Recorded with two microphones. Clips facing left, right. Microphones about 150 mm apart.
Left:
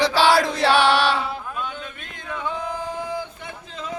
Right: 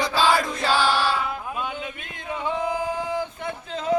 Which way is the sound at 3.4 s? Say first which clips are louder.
Right 5 dB; 55° right (ahead or behind).